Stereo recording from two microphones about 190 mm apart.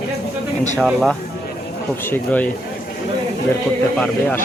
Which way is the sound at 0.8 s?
Centre (ahead or behind).